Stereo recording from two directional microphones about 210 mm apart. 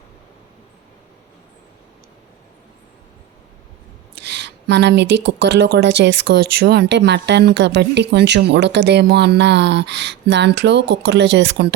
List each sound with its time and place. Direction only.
4.3 s speech: 55° right (ahead or behind)